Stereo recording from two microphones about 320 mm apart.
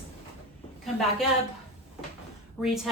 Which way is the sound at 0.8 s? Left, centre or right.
Centre.